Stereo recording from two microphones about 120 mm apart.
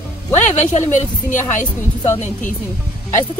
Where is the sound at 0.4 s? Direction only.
80° left.